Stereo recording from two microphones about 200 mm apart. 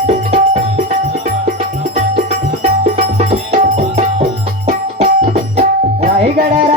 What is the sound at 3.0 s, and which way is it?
Music, 35° right (ahead or behind).